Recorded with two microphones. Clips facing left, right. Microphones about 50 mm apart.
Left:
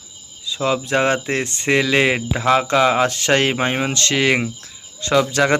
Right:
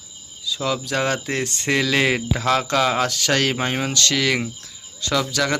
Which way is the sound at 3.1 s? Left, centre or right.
Left.